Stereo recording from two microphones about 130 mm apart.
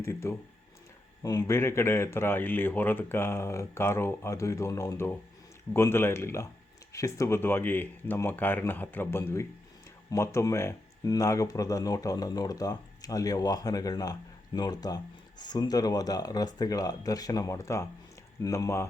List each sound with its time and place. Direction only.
0.0 s speech: 20° left (ahead or behind)